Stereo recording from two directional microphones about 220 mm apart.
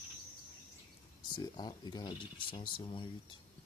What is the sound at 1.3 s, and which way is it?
Speech, 20° left (ahead or behind).